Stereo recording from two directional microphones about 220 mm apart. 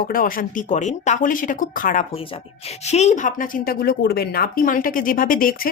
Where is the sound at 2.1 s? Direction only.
25° left (ahead or behind).